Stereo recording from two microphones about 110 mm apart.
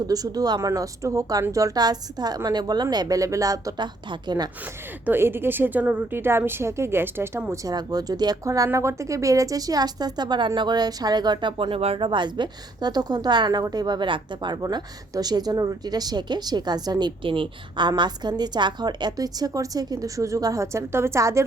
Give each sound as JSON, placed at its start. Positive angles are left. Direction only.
{"t": 0.1, "sound": "speech", "side_deg": -35}
{"t": 4.6, "sound": "a woman's voice", "side_deg": -15}
{"t": 7.6, "sound": "speech", "side_deg": -35}
{"t": 17.2, "sound": "speech", "side_deg": -50}